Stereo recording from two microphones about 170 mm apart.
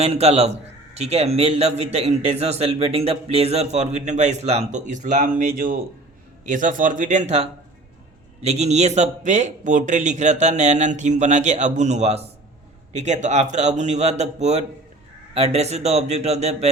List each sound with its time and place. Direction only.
0.0 s a man's voice: 35° right (ahead or behind)